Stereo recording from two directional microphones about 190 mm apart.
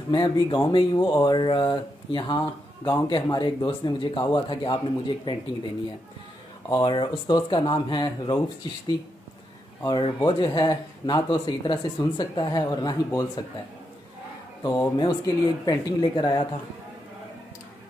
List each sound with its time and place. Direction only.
0.1 s speech: 25° left (ahead or behind)
6.7 s speech: 25° left (ahead or behind)
9.8 s speech: 25° left (ahead or behind)
14.6 s speech: 20° left (ahead or behind)